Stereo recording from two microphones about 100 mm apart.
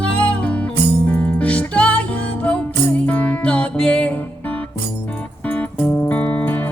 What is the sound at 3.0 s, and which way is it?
Music, 15° left (ahead or behind).